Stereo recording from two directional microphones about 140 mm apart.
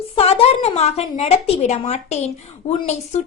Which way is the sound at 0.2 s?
45° left (ahead or behind).